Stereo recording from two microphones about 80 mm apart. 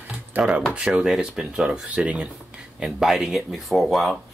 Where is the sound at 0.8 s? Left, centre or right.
Centre.